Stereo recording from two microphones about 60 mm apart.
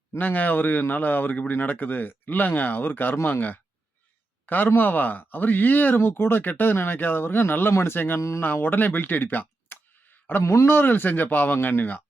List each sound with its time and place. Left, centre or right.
0.2 s speech: left
8.2 s speech: left
8.4 s speech: left
10.4 s speech: left
10.7 s speech: left